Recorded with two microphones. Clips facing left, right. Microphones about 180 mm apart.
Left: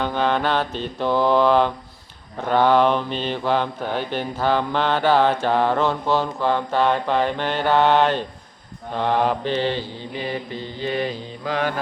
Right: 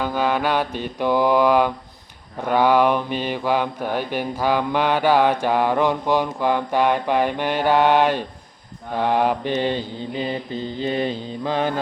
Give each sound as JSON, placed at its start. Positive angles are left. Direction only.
{"t": 0.0, "sound": "mantra", "side_deg": -10}
{"t": 10.8, "sound": "mantra", "side_deg": -25}